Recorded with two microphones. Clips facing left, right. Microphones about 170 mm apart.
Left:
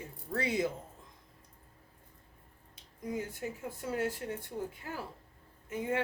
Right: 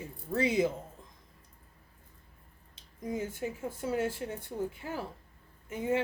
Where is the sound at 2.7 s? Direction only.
25° right (ahead or behind).